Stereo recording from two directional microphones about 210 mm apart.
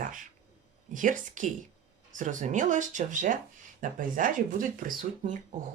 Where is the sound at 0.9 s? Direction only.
40° right (ahead or behind).